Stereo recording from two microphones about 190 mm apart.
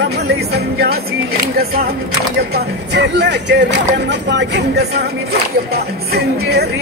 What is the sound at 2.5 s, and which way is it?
Music, 65° right (ahead or behind).